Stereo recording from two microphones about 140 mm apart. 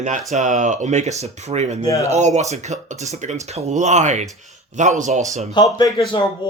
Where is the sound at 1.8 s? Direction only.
25° left (ahead or behind).